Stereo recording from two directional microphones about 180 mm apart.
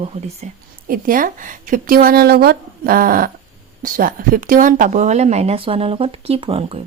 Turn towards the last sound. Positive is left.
turn(degrees=-35)  # may be behind; listen again after turning